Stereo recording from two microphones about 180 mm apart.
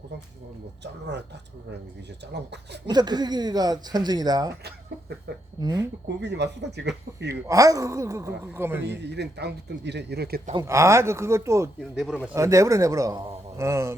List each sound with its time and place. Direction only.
2.8 s speech: 25° right (ahead or behind)
5.5 s speech: 25° right (ahead or behind)
6.1 s speech: 70° right (ahead or behind)
7.4 s a man's voice: 20° right (ahead or behind)
8.8 s speech: 75° right (ahead or behind)
10.5 s a man's voice: 15° right (ahead or behind)